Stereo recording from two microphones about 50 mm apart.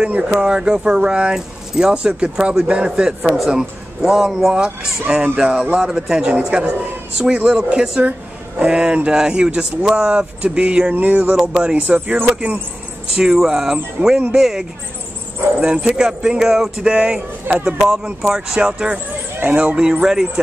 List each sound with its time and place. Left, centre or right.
0.0 s speech: centre
3.3 s speech: centre
10.9 s music: right
11.3 s speech: centre
13.1 s speech: centre
16.8 s speech: centre
17.6 s speech: centre
19.5 s speech: right